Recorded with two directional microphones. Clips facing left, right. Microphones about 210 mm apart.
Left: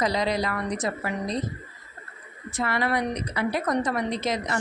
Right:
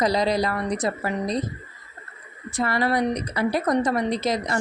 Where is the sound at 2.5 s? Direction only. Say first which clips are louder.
Right 3 dB; 35° right (ahead or behind).